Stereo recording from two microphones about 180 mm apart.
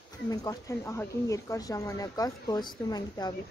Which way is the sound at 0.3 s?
20° left (ahead or behind).